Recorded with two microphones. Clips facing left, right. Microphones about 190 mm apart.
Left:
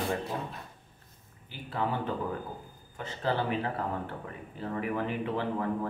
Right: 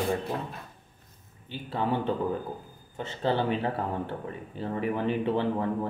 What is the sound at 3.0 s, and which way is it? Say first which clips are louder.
Speech: right 3 dB; 25° right (ahead or behind).